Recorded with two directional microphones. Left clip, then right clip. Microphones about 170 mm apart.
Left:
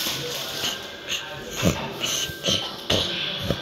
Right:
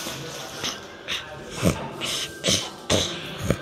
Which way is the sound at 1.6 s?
10° right (ahead or behind).